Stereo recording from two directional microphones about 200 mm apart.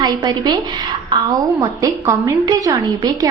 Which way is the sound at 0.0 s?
20° right (ahead or behind).